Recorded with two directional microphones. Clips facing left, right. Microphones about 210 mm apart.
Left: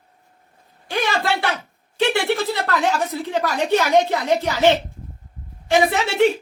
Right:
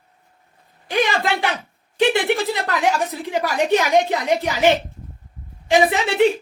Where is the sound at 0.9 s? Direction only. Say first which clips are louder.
Right 2 dB; 15° right (ahead or behind).